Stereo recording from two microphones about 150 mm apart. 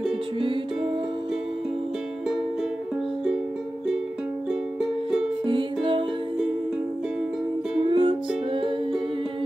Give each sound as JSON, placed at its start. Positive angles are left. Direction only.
{"t": 5.5, "sound": "music", "side_deg": -35}
{"t": 7.9, "sound": "music", "side_deg": -35}